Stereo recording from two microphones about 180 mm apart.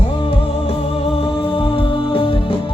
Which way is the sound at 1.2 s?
30° left (ahead or behind).